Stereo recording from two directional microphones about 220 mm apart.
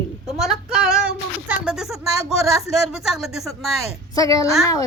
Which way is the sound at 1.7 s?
Centre (ahead or behind).